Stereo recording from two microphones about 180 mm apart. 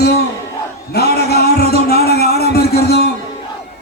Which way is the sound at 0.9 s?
60° left (ahead or behind).